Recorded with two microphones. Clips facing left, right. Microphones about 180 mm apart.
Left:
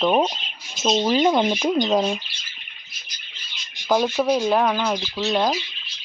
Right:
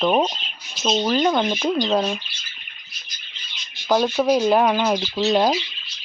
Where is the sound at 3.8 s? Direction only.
5° left (ahead or behind).